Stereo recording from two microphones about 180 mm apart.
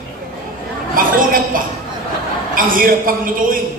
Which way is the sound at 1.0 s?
50° right (ahead or behind).